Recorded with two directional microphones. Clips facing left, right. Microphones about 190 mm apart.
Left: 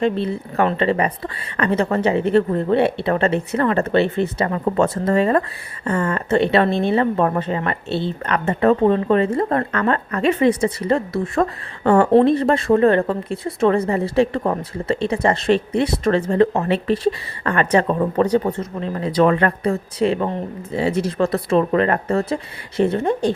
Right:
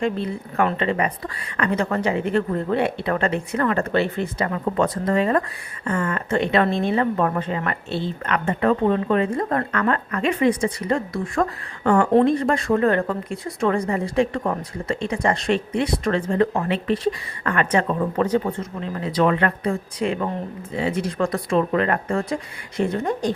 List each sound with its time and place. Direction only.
0.0 s a woman's voice: 25° left (ahead or behind)
5.8 s a woman's voice: 25° left (ahead or behind)